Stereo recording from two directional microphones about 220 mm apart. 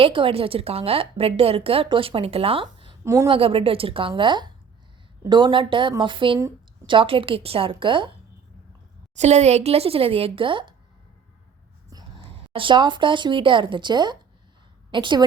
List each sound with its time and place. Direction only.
0.0 s a woman's voice: 25° right (ahead or behind)
3.0 s a woman's voice: 15° right (ahead or behind)
9.1 s a woman's voice: 30° right (ahead or behind)
12.5 s a woman's voice: 20° right (ahead or behind)